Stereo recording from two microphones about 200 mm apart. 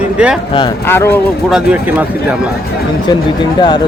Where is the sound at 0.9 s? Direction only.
10° left (ahead or behind).